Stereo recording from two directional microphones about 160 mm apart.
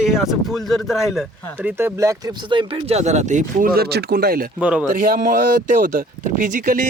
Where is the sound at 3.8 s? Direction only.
80° right.